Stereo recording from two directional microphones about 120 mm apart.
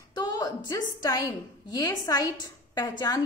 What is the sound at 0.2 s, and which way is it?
A woman's voice, 35° left (ahead or behind).